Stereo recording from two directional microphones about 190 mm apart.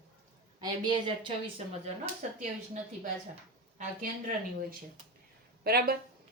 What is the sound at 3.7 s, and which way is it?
Speech, 45° right (ahead or behind).